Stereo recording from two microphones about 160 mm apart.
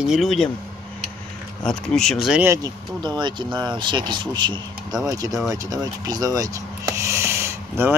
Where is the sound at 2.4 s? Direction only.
20° right (ahead or behind).